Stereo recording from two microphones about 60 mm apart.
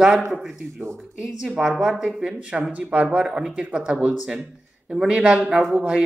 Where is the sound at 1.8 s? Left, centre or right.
Centre.